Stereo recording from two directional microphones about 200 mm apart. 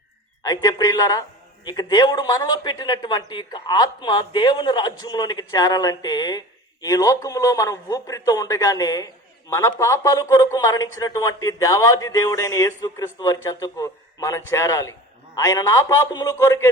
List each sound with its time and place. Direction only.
0.4 s speech: 20° left (ahead or behind)